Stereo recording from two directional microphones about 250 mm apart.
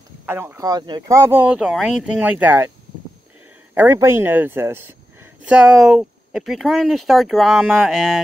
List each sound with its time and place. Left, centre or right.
0.3 s speech: centre
3.7 s speech: centre